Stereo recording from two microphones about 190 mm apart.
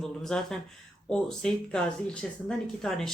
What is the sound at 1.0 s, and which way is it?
Speech, 5° left (ahead or behind).